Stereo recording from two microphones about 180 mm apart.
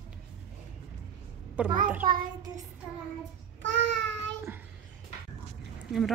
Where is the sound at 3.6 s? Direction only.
85° right.